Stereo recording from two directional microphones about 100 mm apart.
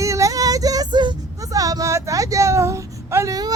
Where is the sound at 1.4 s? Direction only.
35° right (ahead or behind).